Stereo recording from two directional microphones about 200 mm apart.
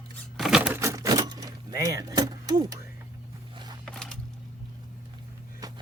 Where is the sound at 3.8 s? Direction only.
Centre (ahead or behind).